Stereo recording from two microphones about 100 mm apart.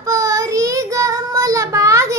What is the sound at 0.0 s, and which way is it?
Child singing, 35° right (ahead or behind).